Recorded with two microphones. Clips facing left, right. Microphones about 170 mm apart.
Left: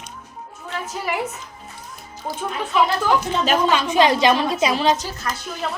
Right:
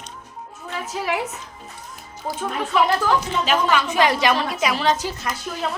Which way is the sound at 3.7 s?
20° left (ahead or behind).